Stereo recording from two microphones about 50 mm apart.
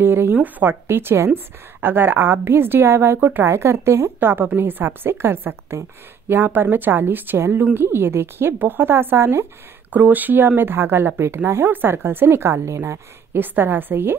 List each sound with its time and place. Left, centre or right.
0.0 s a woman's voice: right
0.4 s speech: right
0.8 s a woman's voice: right
1.3 s a woman's voice: right
3.4 s a woman's voice: right
4.2 s a woman's voice: right
7.3 s a woman's voice: right
9.8 s a woman's voice: right
13.3 s a woman's voice: right